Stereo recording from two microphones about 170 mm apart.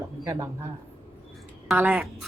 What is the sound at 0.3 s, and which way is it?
Speech, 15° right (ahead or behind).